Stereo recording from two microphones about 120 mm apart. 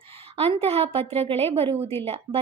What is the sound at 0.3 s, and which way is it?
A woman's voice, 55° right (ahead or behind).